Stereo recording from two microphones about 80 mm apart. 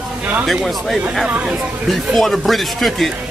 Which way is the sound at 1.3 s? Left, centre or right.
Centre.